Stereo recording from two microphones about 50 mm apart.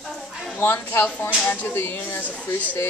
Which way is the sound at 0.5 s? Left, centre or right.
Left.